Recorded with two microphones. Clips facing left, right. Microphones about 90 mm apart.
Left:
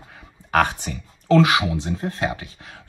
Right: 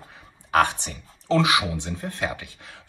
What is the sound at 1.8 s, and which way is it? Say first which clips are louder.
Speech: left 4 dB; 40° left (ahead or behind).